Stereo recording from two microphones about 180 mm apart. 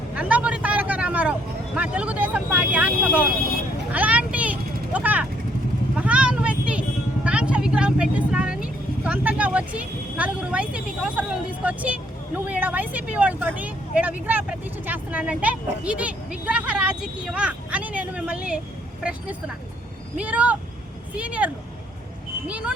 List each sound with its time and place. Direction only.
0.1 s vehicle: 5° right (ahead or behind)
12.5 s speech: 10° right (ahead or behind)
20.1 s speech: 10° right (ahead or behind)